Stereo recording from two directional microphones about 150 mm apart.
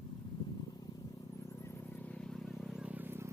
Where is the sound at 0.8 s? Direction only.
20° left (ahead or behind).